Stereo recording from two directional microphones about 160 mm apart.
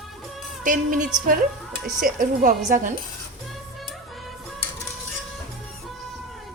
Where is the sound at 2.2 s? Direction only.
55° right (ahead or behind).